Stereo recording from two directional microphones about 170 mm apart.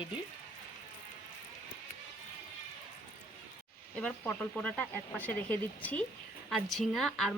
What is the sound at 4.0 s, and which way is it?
Speech, 10° left (ahead or behind).